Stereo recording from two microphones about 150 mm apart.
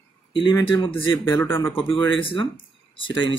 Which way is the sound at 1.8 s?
35° left (ahead or behind).